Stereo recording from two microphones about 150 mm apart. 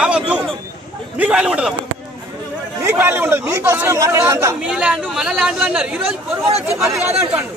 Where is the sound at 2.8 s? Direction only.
15° right (ahead or behind).